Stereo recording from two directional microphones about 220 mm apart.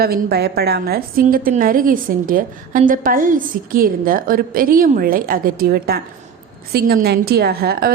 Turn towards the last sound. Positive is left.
turn(degrees=-45)  # may be behind; listen again after turning